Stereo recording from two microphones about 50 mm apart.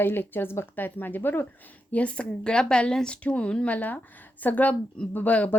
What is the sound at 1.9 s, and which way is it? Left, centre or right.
Speech, left.